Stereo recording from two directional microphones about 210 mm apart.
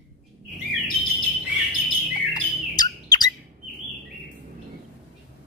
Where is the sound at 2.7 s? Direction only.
20° left (ahead or behind).